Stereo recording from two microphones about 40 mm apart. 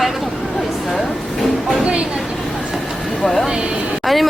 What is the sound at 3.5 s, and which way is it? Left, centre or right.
Speech, right.